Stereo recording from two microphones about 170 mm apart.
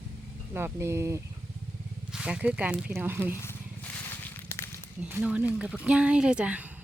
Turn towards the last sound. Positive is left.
turn(degrees=-10)  # may be behind; listen again after turning